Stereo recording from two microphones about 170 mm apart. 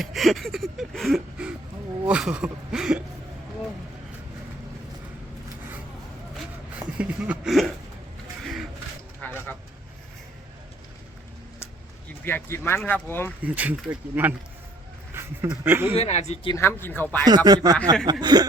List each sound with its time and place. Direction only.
0.1 s gasp: centre (ahead or behind)
2.0 s speech: 5° right (ahead or behind)
6.7 s speech: 10° right (ahead or behind)
9.2 s a sound: 10° left (ahead or behind)
12.2 s speech: 15° left (ahead or behind)
13.4 s speech: 10° right (ahead or behind)
16.0 s speech: 40° left (ahead or behind)
16.6 s speech: 15° left (ahead or behind)
17.2 s speech: 25° right (ahead or behind)